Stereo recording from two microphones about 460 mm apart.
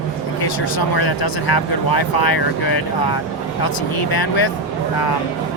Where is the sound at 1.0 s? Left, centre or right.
Left.